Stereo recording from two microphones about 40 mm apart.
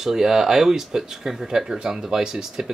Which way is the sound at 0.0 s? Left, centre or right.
Centre.